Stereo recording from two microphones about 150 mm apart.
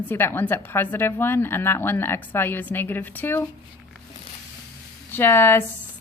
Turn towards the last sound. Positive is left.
turn(degrees=15)  # may be behind; listen again after turning